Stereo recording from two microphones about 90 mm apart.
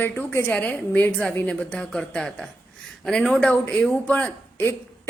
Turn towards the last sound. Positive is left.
turn(degrees=20)  # may be behind; listen again after turning